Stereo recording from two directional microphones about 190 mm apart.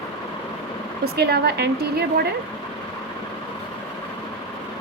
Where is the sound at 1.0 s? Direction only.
55° right (ahead or behind).